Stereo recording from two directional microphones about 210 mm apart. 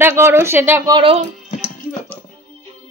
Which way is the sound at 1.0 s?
25° right (ahead or behind).